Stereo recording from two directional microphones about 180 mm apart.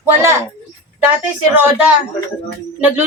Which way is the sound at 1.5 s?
10° right (ahead or behind).